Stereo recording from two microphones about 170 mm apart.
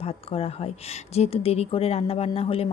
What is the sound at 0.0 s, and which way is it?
Speech, 35° left (ahead or behind).